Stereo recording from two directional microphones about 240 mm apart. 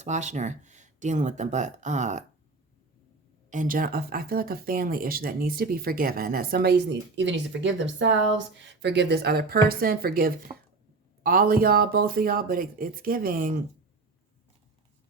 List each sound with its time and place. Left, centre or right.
0.0 s speech: right
3.5 s speech: right